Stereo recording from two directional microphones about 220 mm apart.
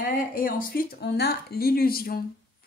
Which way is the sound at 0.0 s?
40° left (ahead or behind).